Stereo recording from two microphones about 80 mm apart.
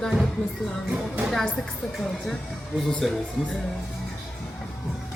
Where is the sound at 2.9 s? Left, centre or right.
Centre.